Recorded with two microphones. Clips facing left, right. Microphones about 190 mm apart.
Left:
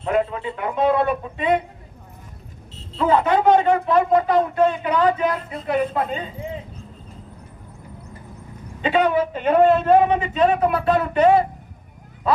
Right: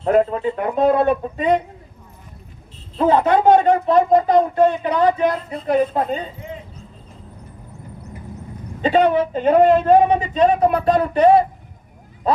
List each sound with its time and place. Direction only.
0.0 s speech: 45° right (ahead or behind)
3.0 s speech: 40° right (ahead or behind)
8.8 s speech: 35° right (ahead or behind)